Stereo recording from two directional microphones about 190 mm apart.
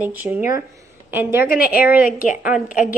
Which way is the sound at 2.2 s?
45° left (ahead or behind).